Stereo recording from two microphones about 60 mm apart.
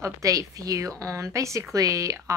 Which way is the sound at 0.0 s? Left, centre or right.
Right.